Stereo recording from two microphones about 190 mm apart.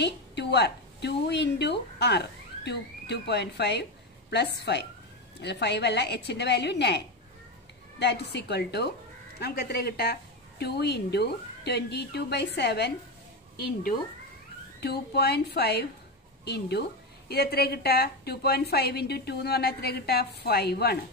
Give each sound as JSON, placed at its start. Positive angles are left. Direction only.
{"t": 0.0, "sound": "a woman's voice", "side_deg": 60}
{"t": 8.0, "sound": "a woman's voice", "side_deg": 65}
{"t": 14.8, "sound": "a woman's voice", "side_deg": 60}